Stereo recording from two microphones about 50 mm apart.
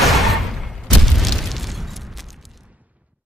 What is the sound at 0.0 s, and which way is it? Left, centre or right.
Boom, centre.